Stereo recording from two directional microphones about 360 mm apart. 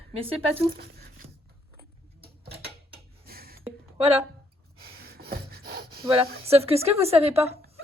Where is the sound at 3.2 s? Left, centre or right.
Right.